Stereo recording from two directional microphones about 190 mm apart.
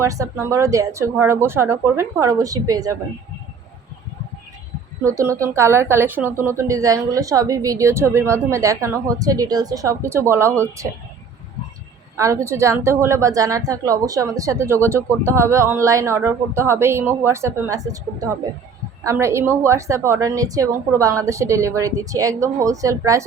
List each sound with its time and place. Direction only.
0.0 s speech: 15° right (ahead or behind)
5.0 s speech: 15° right (ahead or behind)
12.1 s speech: 15° right (ahead or behind)